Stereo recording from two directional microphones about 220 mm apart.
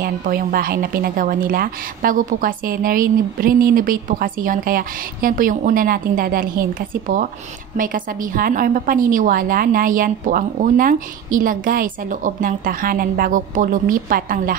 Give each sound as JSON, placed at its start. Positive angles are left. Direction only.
{"t": 0.0, "sound": "a woman's voice", "side_deg": -40}